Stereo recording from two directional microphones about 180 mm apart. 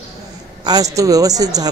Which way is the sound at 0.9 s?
20° right (ahead or behind).